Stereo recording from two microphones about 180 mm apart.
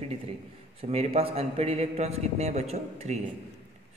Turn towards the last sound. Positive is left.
turn(degrees=-35)  # may be behind; listen again after turning